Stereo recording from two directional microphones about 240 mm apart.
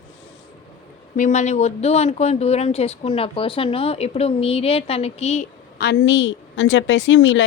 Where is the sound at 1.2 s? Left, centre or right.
Left.